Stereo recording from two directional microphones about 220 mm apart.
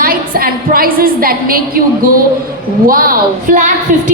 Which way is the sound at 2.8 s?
40° right (ahead or behind).